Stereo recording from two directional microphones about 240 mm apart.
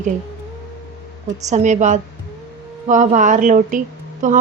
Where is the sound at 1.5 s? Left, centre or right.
Right.